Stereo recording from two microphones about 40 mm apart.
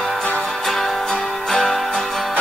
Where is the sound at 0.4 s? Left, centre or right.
Centre.